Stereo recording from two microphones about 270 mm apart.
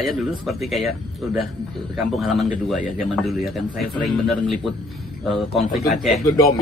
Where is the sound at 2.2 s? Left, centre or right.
Centre.